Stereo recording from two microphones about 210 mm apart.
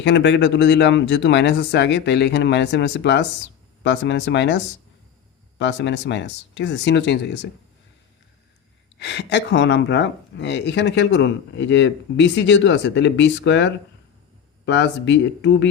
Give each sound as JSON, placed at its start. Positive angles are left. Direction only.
{"t": 0.0, "sound": "speech", "side_deg": 55}
{"t": 9.0, "sound": "speech", "side_deg": 55}